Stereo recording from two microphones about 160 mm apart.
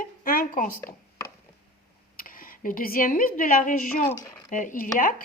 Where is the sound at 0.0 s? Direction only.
60° left (ahead or behind).